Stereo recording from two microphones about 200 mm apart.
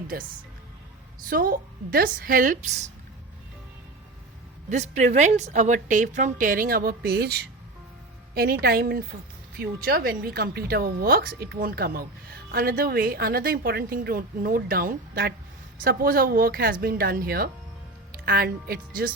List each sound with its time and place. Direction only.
1.3 s a woman's voice: 45° right (ahead or behind)
4.7 s a woman's voice: 35° right (ahead or behind); by 7.4 s 55° right (ahead or behind)
8.6 s a woman's voice: 50° right (ahead or behind)